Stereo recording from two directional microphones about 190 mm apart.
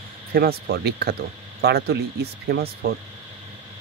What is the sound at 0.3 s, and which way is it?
Speech, 55° right (ahead or behind).